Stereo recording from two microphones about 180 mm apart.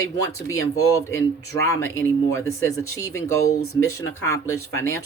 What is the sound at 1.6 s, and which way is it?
Speech, 15° left (ahead or behind).